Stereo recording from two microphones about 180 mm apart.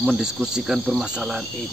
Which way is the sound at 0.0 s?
Centre (ahead or behind).